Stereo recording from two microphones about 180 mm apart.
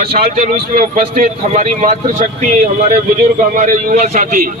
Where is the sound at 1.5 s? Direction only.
40° right (ahead or behind).